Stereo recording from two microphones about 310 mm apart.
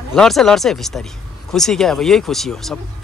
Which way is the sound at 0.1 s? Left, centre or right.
Centre.